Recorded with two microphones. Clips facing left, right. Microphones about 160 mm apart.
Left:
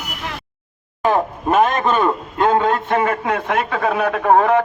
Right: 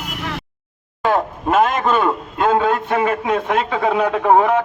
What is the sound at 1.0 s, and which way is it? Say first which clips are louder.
Speech: left 1 dB; 15° left (ahead or behind).